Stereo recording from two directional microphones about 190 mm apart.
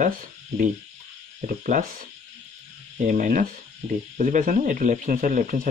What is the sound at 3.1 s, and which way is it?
A man's voice, 45° right (ahead or behind).